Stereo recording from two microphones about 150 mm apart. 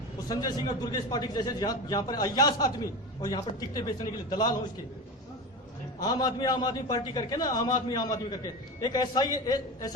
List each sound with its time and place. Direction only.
0.3 s a man's voice: 25° left (ahead or behind)
6.0 s a man's voice: 25° left (ahead or behind)